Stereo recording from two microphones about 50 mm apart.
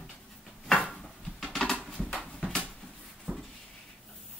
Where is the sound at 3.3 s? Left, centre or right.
Right.